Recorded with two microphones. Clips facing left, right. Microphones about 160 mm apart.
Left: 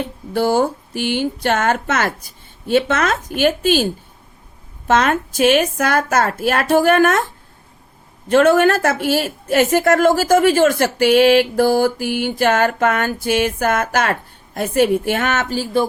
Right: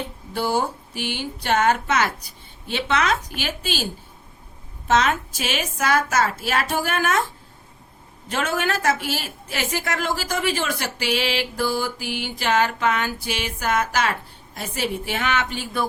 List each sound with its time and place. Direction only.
0.3 s a woman's voice: 50° left (ahead or behind)
4.9 s a woman's voice: 55° left (ahead or behind)
8.3 s a woman's voice: 55° left (ahead or behind); by 15.9 s 30° left (ahead or behind)